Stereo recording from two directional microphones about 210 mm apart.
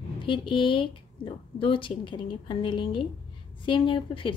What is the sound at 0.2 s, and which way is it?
A woman's voice, 25° left (ahead or behind).